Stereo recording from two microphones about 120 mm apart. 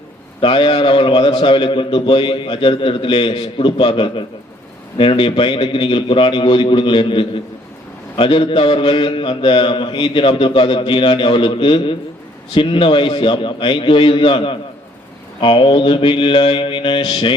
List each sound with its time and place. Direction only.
0.4 s a man's voice: 45° left (ahead or behind)